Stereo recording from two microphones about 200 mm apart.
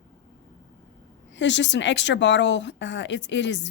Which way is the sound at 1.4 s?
65° left (ahead or behind).